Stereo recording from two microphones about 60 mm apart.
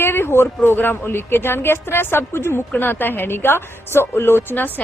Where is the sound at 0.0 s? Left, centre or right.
Left.